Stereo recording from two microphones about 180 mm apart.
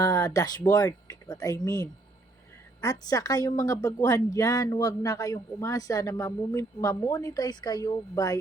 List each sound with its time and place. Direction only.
0.0 s a woman's voice: 15° left (ahead or behind)